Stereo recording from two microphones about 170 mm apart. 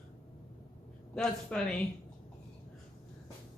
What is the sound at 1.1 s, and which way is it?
Speech, 5° left (ahead or behind).